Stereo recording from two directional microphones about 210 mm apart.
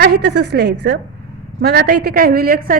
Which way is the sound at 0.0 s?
55° right (ahead or behind).